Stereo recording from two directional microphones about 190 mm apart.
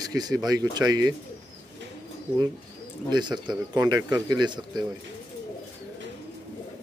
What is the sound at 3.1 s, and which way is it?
Speech, 25° right (ahead or behind).